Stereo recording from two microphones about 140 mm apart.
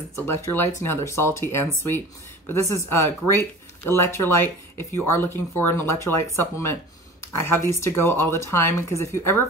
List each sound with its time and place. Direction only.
0.1 s speech: 15° left (ahead or behind)
7.4 s speech: 20° left (ahead or behind)